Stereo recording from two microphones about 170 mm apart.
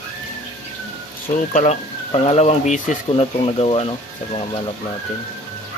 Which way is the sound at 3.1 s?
30° left (ahead or behind).